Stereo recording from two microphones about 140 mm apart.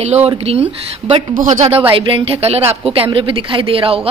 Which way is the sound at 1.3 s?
65° right (ahead or behind).